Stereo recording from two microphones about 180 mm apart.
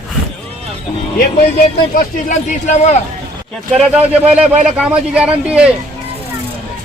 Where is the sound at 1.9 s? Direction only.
50° left (ahead or behind).